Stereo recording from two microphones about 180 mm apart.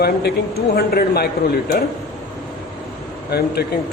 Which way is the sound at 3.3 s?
60° left (ahead or behind).